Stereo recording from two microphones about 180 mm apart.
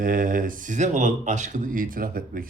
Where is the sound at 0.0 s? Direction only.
50° right (ahead or behind).